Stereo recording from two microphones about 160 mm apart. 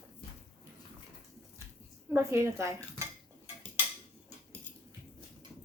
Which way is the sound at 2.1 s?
15° right (ahead or behind).